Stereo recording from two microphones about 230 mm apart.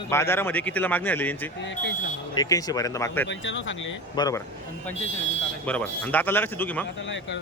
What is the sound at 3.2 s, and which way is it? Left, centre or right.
Speech, left.